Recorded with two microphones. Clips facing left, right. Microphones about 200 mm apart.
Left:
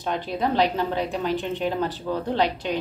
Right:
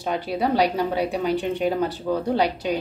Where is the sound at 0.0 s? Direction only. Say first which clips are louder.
Right 2 dB; 10° right (ahead or behind).